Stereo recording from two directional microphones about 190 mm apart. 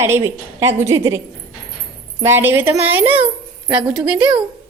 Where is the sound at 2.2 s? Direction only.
10° right (ahead or behind).